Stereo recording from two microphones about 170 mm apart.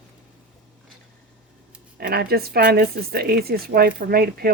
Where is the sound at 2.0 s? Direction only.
65° right (ahead or behind).